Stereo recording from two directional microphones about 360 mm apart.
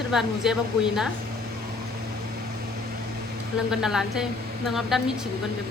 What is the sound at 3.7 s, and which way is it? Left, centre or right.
A woman's voice, centre.